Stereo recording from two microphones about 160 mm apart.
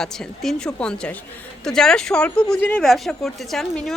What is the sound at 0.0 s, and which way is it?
A woman's voice, 5° left (ahead or behind).